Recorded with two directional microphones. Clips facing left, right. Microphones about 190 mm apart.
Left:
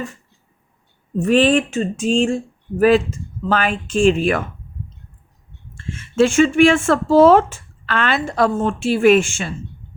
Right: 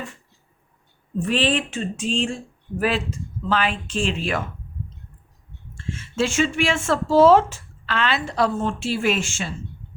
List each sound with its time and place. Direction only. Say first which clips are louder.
1.2 s speech: left 8 dB; 45° left (ahead or behind)
5.7 s speech: left 8 dB; 55° left (ahead or behind)